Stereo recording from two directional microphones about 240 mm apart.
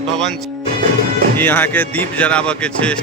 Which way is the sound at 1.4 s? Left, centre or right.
Centre.